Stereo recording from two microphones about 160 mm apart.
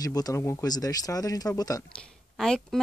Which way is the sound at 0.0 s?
25° left (ahead or behind).